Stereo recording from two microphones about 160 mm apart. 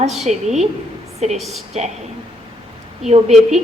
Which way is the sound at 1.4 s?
Centre (ahead or behind).